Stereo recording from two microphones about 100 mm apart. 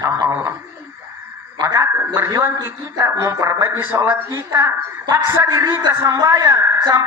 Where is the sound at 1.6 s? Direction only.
30° right (ahead or behind).